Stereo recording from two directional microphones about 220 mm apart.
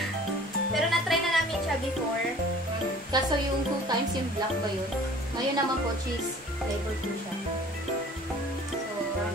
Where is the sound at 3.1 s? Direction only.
20° right (ahead or behind).